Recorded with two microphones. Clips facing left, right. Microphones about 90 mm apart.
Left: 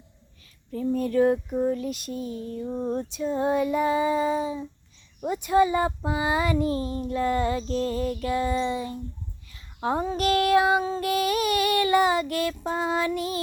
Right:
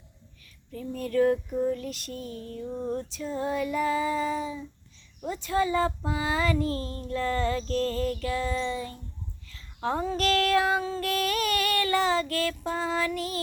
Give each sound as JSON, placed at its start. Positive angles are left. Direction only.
{"t": 0.7, "sound": "a sound", "side_deg": 35}
{"t": 0.9, "sound": "female singing", "side_deg": 25}
{"t": 5.2, "sound": "child singing", "side_deg": 20}